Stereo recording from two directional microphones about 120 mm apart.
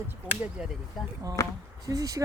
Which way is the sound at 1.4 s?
25° left (ahead or behind).